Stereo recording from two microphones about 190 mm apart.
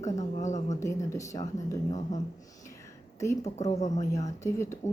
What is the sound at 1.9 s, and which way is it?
Speech, 40° left (ahead or behind).